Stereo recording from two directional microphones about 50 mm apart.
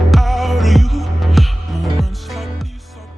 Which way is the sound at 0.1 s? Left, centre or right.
Centre.